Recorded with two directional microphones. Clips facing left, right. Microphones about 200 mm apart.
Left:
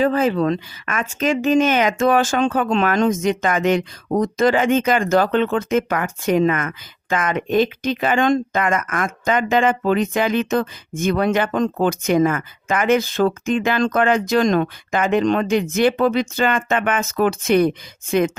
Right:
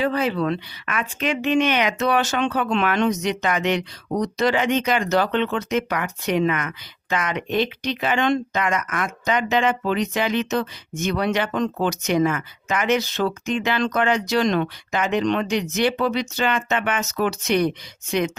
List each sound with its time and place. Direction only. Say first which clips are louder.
0.0 s speech: left 4 dB; 45° left (ahead or behind)